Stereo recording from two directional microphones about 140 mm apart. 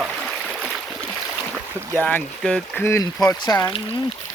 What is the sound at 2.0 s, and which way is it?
Speech, 10° left (ahead or behind).